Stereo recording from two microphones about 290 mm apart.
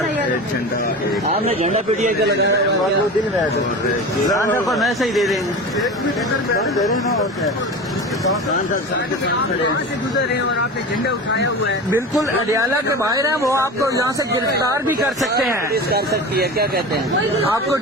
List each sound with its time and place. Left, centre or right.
1.6 s speech: right
4.3 s speech: centre
4.7 s speech: centre
11.9 s a man's voice: centre
15.7 s speech: right